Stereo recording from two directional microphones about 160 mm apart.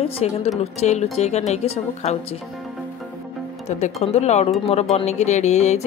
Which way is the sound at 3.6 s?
45° left (ahead or behind).